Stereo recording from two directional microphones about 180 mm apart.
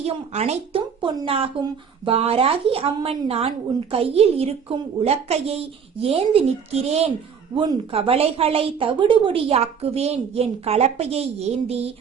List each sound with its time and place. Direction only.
0.0 s speech: 35° right (ahead or behind)